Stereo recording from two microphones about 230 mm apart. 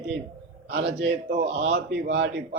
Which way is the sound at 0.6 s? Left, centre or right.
Right.